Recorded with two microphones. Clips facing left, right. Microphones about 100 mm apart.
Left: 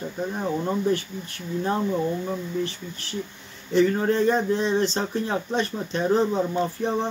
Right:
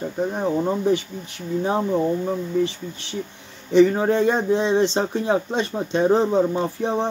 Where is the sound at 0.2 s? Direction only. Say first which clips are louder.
Right 5 dB; 25° right (ahead or behind).